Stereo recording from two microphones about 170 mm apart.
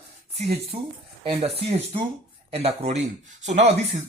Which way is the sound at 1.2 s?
35° right (ahead or behind).